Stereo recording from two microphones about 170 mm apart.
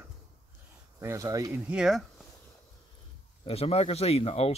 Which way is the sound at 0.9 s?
20° right (ahead or behind).